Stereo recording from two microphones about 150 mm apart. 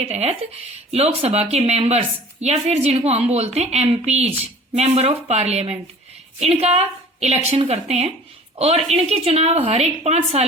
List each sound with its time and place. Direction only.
0.0 s a woman's voice: 45° right (ahead or behind)